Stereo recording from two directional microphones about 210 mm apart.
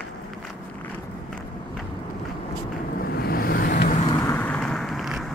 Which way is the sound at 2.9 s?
45° left (ahead or behind).